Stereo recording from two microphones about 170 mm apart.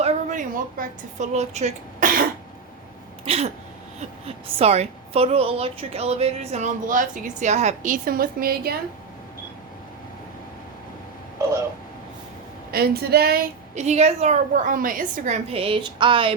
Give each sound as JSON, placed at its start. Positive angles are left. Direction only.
{"t": 0.0, "sound": "a woman's voice", "side_deg": -45}
{"t": 3.2, "sound": "a woman's voice", "side_deg": -35}
{"t": 12.7, "sound": "speech", "side_deg": -65}
{"t": 13.7, "sound": "a woman's voice", "side_deg": -40}